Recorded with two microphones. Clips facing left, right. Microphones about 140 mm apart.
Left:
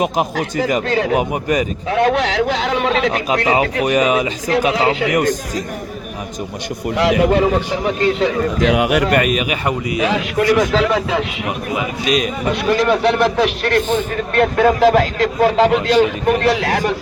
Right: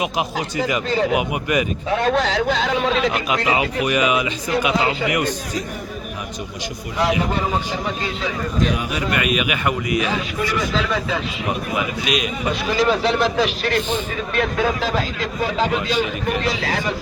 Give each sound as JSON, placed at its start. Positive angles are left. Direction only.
{"t": 1.1, "sound": "speech", "side_deg": 35}
{"t": 1.9, "sound": "a man's voice", "side_deg": 70}
{"t": 3.1, "sound": "speech", "side_deg": 40}
{"t": 4.7, "sound": "speech", "side_deg": 80}
{"t": 5.1, "sound": "a man's voice", "side_deg": 45}
{"t": 6.9, "sound": "a man's voice", "side_deg": 90}
{"t": 8.2, "sound": "a man's voice", "side_deg": 70}
{"t": 9.1, "sound": "speech", "side_deg": 40}
{"t": 10.1, "sound": "a man's voice", "side_deg": 75}
{"t": 12.0, "sound": "speech", "side_deg": 40}
{"t": 12.5, "sound": "speech", "side_deg": 60}